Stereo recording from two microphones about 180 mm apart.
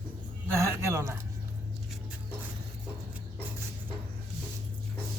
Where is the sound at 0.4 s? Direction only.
15° right (ahead or behind).